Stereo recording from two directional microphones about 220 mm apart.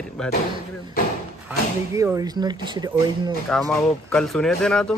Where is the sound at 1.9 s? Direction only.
15° right (ahead or behind).